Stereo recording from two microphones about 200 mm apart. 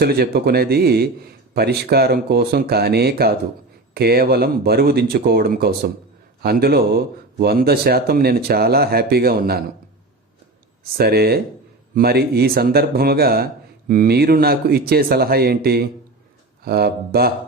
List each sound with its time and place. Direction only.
0.0 s speech: 50° right (ahead or behind)
10.9 s speech: 50° right (ahead or behind)